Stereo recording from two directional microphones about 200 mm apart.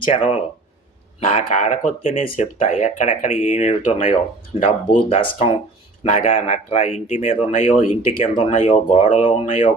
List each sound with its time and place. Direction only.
0.0 s speech: 35° left (ahead or behind)
2.1 s speech: 30° left (ahead or behind)